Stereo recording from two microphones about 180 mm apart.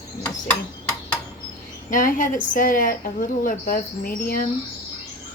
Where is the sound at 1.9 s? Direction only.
45° left (ahead or behind).